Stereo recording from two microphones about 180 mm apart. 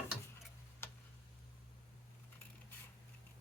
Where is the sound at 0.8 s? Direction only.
15° left (ahead or behind).